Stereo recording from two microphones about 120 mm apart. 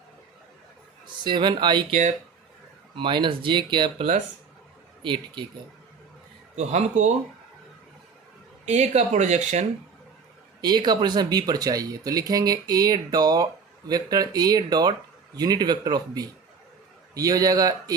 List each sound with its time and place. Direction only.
1.0 s speech: 40° right (ahead or behind)
1.9 s speech: 70° right (ahead or behind)
2.9 s speech: 40° right (ahead or behind)
6.6 s speech: 70° right (ahead or behind)
8.6 s speech: 70° right (ahead or behind)
10.6 s speech: 35° right (ahead or behind)